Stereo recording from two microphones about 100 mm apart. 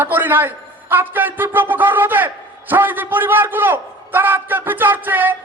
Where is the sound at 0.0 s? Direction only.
20° right (ahead or behind).